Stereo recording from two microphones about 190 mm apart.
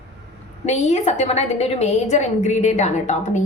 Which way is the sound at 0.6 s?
35° left (ahead or behind).